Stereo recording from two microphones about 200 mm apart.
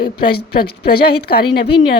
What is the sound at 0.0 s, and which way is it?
Speech, 50° left (ahead or behind).